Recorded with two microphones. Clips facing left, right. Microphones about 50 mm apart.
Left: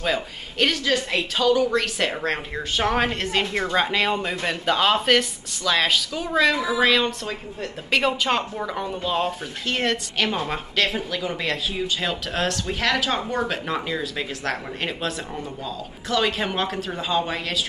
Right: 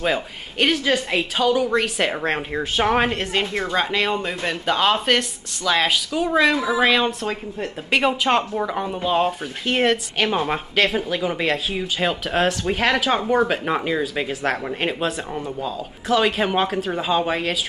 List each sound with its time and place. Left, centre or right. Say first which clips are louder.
0.0 s a woman's voice: right 2 dB; centre